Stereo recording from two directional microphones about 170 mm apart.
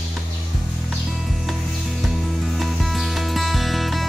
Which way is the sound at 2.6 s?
Centre (ahead or behind).